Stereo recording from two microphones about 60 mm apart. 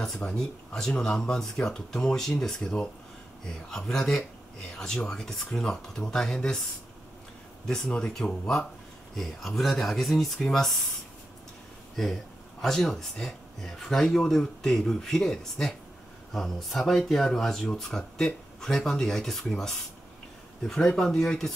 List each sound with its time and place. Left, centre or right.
0.2 s speech: left
0.7 s speech: centre
7.6 s speech: centre
12.6 s speech: centre